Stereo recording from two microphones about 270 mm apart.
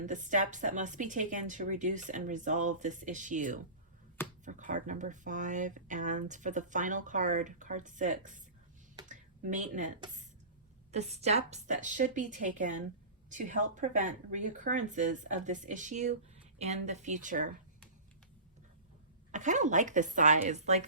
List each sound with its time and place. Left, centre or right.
0.0 s speech: right
9.0 s a sound: right
10.9 s speech: right
19.3 s speech: right